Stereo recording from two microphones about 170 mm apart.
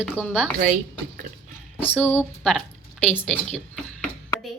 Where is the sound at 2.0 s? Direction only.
10° left (ahead or behind).